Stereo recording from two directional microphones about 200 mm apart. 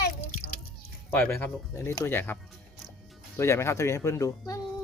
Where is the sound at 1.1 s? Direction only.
10° left (ahead or behind).